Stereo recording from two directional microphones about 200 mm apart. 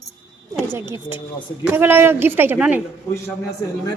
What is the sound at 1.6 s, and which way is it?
A man's voice, 10° right (ahead or behind).